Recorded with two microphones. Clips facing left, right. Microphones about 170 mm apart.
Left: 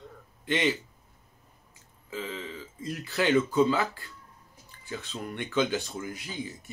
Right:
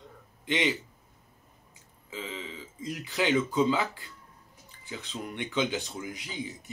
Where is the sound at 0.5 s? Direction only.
15° right (ahead or behind).